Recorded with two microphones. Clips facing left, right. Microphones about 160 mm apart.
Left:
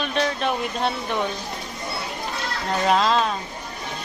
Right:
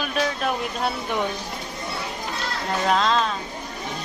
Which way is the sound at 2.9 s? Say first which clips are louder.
Left 2 dB; 5° left (ahead or behind).